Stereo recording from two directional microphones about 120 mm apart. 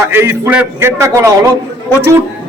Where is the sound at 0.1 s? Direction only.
20° right (ahead or behind).